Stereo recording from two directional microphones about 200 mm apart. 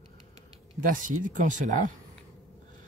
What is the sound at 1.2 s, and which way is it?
Speech, 40° right (ahead or behind).